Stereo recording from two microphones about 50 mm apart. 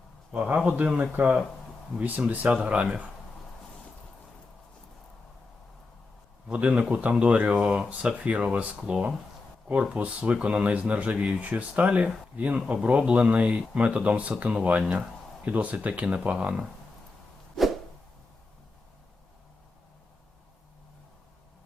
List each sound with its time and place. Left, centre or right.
0.3 s speech: right
6.5 s speech: right
17.6 s a sound: centre